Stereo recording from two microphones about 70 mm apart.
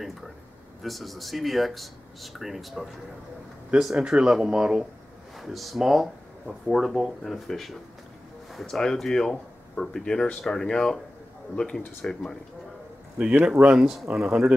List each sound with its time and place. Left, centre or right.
0.8 s speech: centre
3.9 s speech: centre
5.4 s speech: centre
13.5 s speech: centre